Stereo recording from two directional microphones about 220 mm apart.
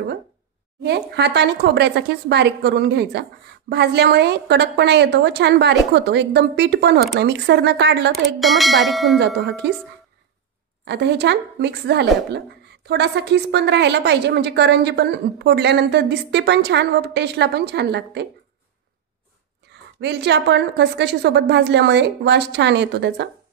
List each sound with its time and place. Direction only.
0.8 s a woman's voice: 50° right (ahead or behind)
8.4 s bell: centre (ahead or behind)
9.2 s a woman's voice: 50° right (ahead or behind)
10.9 s a woman's voice: 50° right (ahead or behind)
20.0 s a woman's voice: 50° right (ahead or behind)